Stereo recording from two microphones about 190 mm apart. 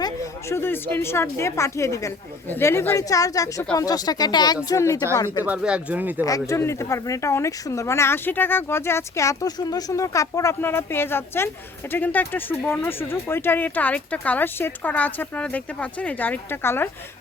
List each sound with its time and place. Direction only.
0.0 s speech: 15° left (ahead or behind)
5.5 s speech: 5° right (ahead or behind)
6.2 s speech: 15° left (ahead or behind)